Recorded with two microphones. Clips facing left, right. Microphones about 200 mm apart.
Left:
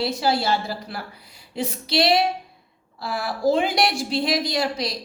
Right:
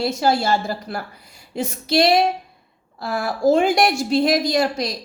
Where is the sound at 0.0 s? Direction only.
45° right (ahead or behind).